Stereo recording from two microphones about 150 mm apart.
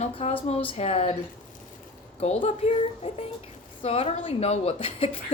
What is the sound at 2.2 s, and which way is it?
A woman's voice, 40° left (ahead or behind).